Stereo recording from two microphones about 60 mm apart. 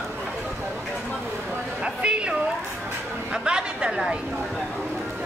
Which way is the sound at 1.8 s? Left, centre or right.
Centre.